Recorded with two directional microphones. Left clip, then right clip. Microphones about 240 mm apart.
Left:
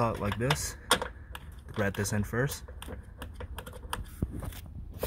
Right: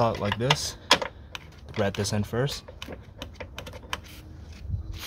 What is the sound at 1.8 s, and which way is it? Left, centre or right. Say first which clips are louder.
Speech: right 4 dB; centre.